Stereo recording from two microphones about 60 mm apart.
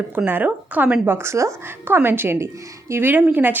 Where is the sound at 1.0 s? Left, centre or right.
Right.